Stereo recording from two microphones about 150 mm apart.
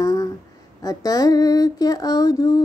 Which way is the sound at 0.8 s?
25° left (ahead or behind).